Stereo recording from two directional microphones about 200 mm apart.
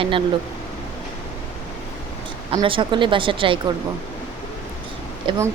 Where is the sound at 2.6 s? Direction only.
25° right (ahead or behind).